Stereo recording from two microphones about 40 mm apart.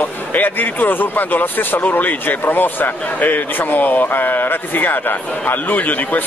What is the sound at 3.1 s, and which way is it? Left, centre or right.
Speech, left.